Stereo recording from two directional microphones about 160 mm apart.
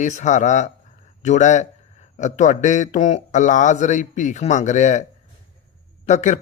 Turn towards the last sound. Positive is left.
turn(degrees=45)  # may be behind; listen again after turning